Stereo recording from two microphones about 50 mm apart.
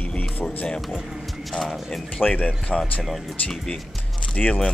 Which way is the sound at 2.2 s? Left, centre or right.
Left.